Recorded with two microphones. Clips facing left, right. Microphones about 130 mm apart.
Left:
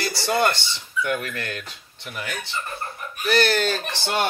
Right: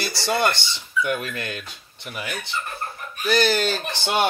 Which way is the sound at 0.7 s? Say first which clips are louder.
Right 1 dB; 20° right (ahead or behind).